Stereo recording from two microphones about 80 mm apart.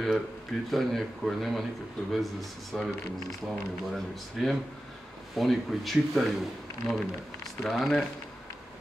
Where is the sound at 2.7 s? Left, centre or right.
Centre.